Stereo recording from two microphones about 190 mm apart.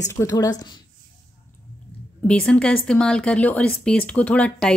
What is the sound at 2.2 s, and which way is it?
Speech, 5° left (ahead or behind).